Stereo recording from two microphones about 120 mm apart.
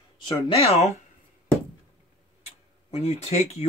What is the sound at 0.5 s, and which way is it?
Speech, 60° left (ahead or behind).